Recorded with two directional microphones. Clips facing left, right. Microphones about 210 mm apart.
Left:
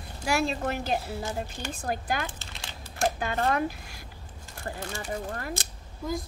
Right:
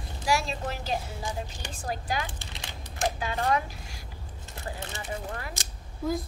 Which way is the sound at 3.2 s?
55° left (ahead or behind).